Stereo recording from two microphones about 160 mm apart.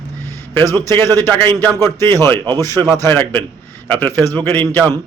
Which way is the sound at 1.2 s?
15° left (ahead or behind).